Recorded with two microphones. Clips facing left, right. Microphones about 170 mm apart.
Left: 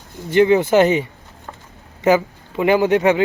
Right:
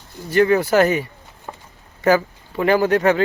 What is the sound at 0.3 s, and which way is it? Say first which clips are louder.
Speech: left 2 dB; 20° left (ahead or behind).